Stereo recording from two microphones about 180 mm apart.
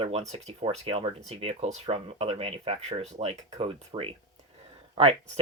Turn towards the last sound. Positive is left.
turn(degrees=-30)  # may be behind; listen again after turning